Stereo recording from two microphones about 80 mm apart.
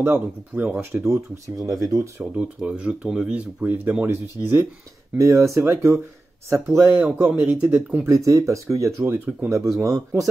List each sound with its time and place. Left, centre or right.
0.0 s speech: right
0.9 s speech: right
1.6 s speech: right
2.3 s speech: centre; by 5.9 s right
7.0 s speech: centre
8.0 s speech: right
9.5 s speech: right